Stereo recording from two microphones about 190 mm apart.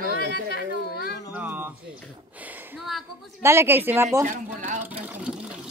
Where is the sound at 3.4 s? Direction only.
15° right (ahead or behind).